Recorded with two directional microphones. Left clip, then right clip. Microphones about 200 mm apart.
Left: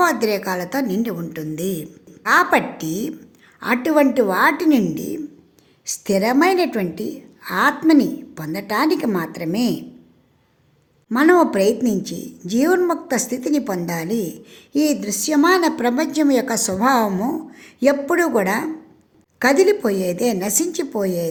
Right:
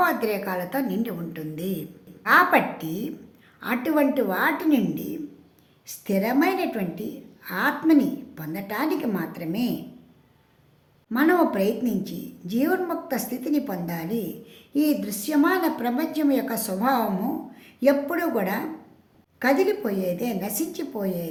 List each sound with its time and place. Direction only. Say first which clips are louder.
0.0 s a woman's voice: left 5 dB; 35° left (ahead or behind)
11.1 s a woman's voice: left 6 dB; 35° left (ahead or behind)